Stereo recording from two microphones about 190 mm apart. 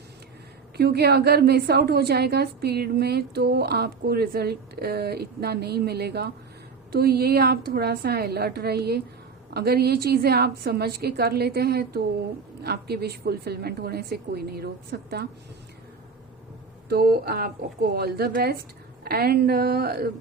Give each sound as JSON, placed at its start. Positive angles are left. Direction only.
{"t": 0.8, "sound": "a woman's voice", "side_deg": -60}
{"t": 16.9, "sound": "a woman's voice", "side_deg": -50}